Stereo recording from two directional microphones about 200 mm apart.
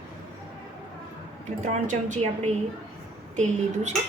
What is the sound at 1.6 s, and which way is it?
Speech, 35° right (ahead or behind).